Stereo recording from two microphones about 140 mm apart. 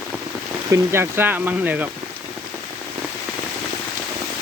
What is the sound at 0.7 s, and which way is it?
Speech, 20° right (ahead or behind).